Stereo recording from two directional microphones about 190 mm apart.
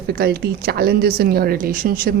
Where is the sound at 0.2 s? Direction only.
55° right (ahead or behind).